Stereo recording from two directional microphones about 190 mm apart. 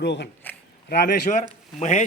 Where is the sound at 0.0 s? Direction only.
65° left (ahead or behind).